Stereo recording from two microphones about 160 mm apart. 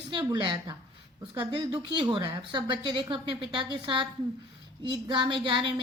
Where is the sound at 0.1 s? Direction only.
30° right (ahead or behind).